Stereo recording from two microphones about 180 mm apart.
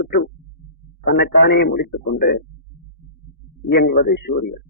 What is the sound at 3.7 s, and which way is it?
Speech, 65° left (ahead or behind).